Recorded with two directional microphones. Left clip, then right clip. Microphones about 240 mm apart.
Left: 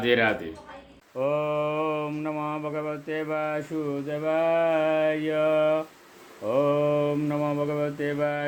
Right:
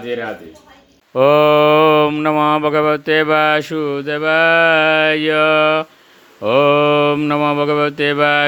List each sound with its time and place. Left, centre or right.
0.0 s speech: left
1.1 s speech: right